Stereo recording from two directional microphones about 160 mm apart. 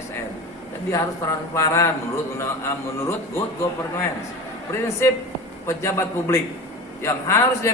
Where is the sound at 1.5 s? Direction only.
20° left (ahead or behind).